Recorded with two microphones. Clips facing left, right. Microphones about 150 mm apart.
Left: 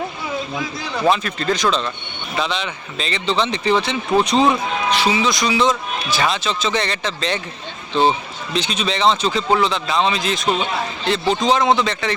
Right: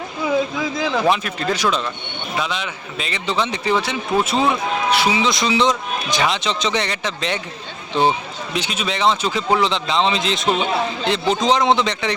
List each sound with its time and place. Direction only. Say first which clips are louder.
1.1 s speech: left 1 dB; 10° right (ahead or behind)
8.5 s a man's voice: left 2 dB; 10° right (ahead or behind)